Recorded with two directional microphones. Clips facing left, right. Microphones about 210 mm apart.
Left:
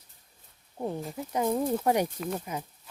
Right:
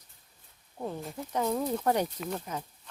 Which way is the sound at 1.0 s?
10° left (ahead or behind).